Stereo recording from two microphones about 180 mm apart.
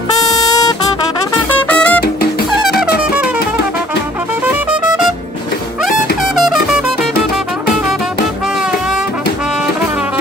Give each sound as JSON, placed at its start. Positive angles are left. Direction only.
{"t": 0.3, "sound": "music", "side_deg": 20}
{"t": 1.6, "sound": "music", "side_deg": 10}
{"t": 6.3, "sound": "music", "side_deg": 0}